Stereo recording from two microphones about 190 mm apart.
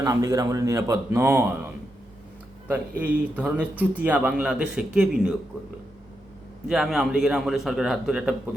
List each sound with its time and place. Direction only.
0.0 s a man's voice: 15° right (ahead or behind)
3.0 s a man's voice: 5° right (ahead or behind)
6.7 s a man's voice: 5° right (ahead or behind)